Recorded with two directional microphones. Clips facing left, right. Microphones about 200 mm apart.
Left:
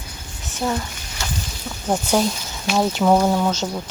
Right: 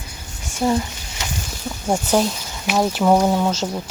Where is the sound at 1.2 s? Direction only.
20° right (ahead or behind).